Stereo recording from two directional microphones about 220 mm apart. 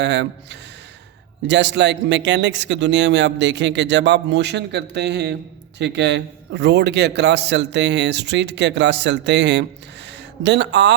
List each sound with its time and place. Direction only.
0.0 s speech: 50° right (ahead or behind)
1.5 s speech: 55° right (ahead or behind)